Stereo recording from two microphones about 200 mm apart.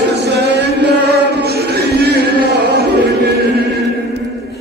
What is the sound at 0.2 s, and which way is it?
Chant, 55° right (ahead or behind).